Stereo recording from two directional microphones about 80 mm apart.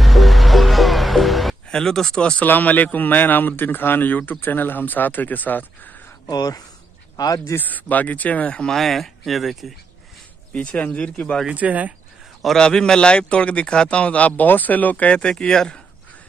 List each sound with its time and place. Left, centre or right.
0.0 s music: centre
1.7 s a man's voice: centre
2.4 s a man's voice: left
6.2 s speech: left
7.5 s a man's voice: left; by 9.7 s centre
10.5 s a man's voice: centre
11.4 s speech: centre
12.4 s a man's voice: centre